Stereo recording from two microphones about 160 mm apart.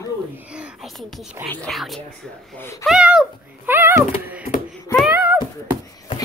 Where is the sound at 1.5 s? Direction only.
5° left (ahead or behind); by 4.0 s 15° right (ahead or behind).